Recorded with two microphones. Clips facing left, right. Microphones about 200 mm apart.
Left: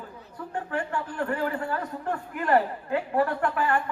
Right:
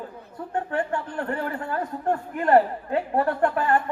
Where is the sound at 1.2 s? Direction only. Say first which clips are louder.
Left 4 dB; 40° right (ahead or behind).